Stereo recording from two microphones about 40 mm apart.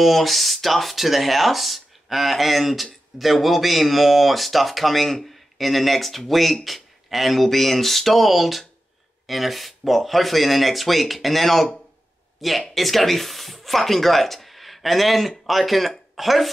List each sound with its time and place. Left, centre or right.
0.0 s speech: centre